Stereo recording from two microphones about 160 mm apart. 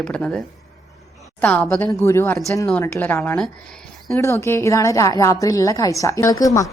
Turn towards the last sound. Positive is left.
turn(degrees=20)  # may be behind; listen again after turning